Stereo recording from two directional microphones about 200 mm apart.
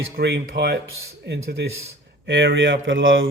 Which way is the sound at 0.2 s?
55° right (ahead or behind).